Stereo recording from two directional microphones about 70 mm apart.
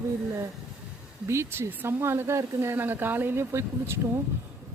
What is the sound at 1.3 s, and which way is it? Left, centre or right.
A woman's voice, right.